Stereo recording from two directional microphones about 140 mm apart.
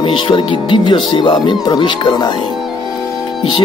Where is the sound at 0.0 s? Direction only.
40° left (ahead or behind).